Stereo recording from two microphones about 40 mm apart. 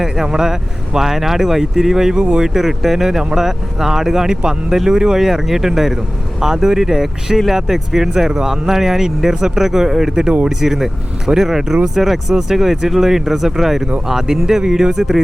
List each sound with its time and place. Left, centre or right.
0.0 s speech: centre
2.1 s speech: right
2.4 s speech: centre